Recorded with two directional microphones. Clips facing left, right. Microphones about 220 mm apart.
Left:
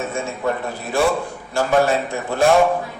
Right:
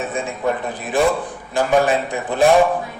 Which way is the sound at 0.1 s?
15° right (ahead or behind).